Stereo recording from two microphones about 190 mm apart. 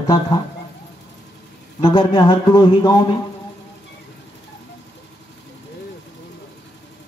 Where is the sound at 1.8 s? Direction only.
25° left (ahead or behind).